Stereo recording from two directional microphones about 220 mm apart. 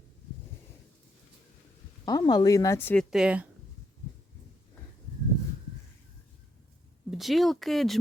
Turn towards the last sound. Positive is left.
turn(degrees=0)  # may be behind; listen again after turning